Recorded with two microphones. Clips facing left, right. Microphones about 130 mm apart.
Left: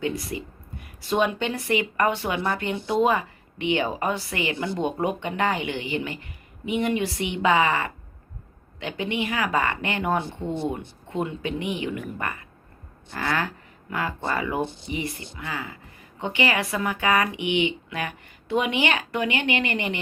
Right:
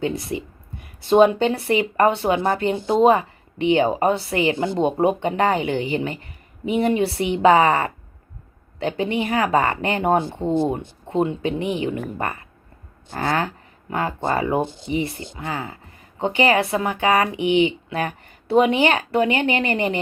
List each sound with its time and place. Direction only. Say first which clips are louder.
0.0 s speech: right 4 dB; 25° right (ahead or behind)